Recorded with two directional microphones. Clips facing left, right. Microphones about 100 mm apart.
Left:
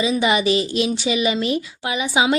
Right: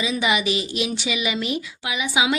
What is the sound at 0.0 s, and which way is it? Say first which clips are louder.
Speech: left 4 dB; 30° left (ahead or behind).